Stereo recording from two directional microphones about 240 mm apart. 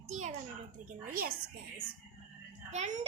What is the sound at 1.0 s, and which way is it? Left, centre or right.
Speech, right.